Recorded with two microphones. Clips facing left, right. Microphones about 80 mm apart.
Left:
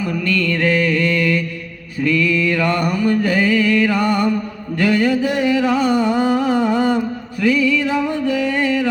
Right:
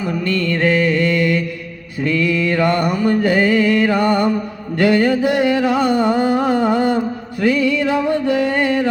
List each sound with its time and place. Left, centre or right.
0.0 s mantra: right
4.8 s a sound: right
7.4 s music: right